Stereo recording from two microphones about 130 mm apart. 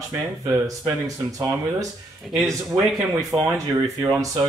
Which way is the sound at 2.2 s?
Centre (ahead or behind).